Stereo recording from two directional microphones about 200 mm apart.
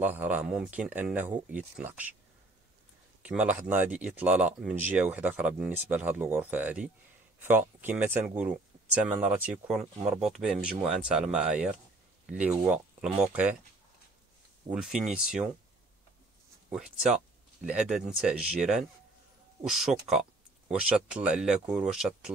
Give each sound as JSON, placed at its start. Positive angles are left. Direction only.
{"t": 0.0, "sound": "speech", "side_deg": -10}
{"t": 3.2, "sound": "speech", "side_deg": -5}
{"t": 14.7, "sound": "speech", "side_deg": -5}
{"t": 16.7, "sound": "speech", "side_deg": 0}